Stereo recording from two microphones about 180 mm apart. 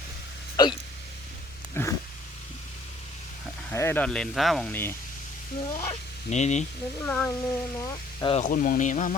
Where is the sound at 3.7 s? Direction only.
10° left (ahead or behind).